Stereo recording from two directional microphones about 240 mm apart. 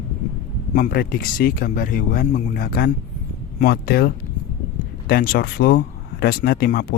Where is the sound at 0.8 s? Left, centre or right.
Left.